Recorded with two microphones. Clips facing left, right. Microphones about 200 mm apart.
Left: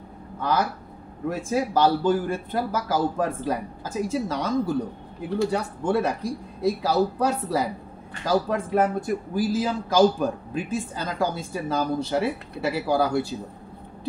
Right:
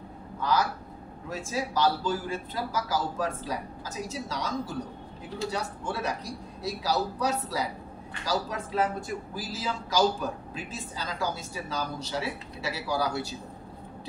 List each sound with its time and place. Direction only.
0.4 s a man's voice: 55° left (ahead or behind)